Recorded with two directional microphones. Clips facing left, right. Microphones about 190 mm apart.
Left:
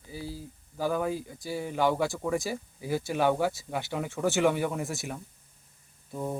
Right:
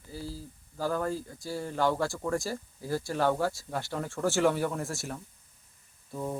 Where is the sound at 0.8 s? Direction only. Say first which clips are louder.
Left 2 dB; 5° left (ahead or behind).